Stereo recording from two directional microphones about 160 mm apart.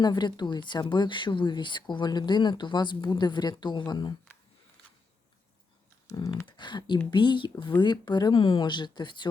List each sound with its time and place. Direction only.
0.0 s speech: 25° left (ahead or behind)
6.1 s speech: 20° left (ahead or behind)